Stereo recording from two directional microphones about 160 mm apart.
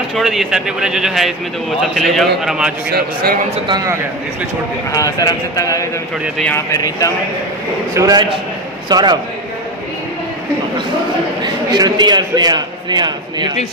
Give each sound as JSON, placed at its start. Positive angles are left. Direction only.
{"t": 0.1, "sound": "speech", "side_deg": 0}
{"t": 3.4, "sound": "a man's voice", "side_deg": -40}
{"t": 4.9, "sound": "speech", "side_deg": 20}
{"t": 7.9, "sound": "a man's voice", "side_deg": -25}
{"t": 11.4, "sound": "a man's voice", "side_deg": -25}